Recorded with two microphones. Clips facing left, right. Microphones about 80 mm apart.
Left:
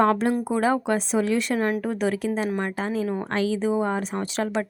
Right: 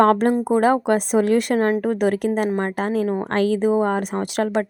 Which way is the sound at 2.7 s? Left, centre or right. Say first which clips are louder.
Right 5 dB; right.